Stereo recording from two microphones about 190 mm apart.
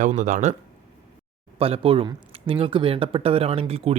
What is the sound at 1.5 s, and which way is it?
Speech, 30° right (ahead or behind).